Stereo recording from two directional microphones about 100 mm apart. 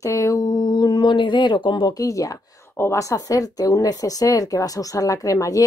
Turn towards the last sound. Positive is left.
turn(degrees=35)  # may be behind; listen again after turning